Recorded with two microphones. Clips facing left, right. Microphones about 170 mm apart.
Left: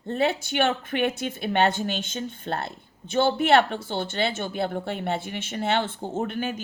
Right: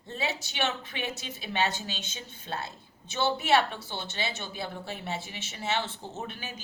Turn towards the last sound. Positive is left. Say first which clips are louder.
# left 11 dB
turn(degrees=55)  # may be behind; listen again after turning